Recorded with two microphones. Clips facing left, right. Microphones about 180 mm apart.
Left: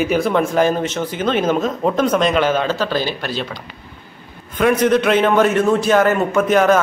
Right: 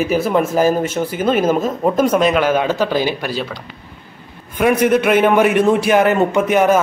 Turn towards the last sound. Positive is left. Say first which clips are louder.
# even
turn(degrees=-15)  # may be behind; listen again after turning